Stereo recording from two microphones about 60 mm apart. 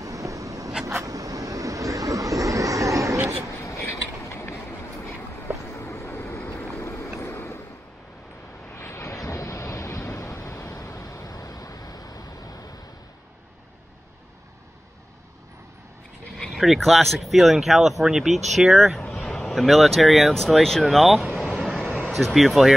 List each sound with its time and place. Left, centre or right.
0.0 s vehicle: right
1.0 s vehicle: right
3.6 s vehicle: left
5.7 s a sound: left
7.2 s train: left
8.7 s vehicle: left
16.5 s speech: centre